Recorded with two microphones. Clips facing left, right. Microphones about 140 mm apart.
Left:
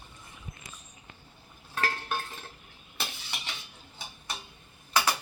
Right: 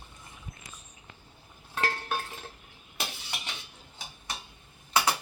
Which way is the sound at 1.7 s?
20° right (ahead or behind).